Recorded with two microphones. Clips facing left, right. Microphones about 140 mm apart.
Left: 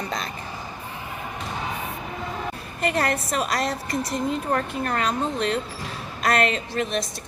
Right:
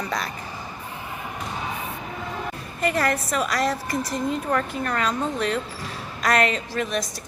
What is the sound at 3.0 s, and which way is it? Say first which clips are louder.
Speech: even; 25° left (ahead or behind).